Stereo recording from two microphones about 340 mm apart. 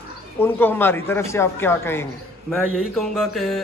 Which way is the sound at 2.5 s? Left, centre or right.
Centre.